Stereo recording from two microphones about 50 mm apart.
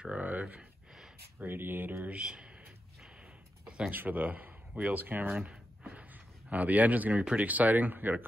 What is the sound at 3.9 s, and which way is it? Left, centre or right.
Speech, right.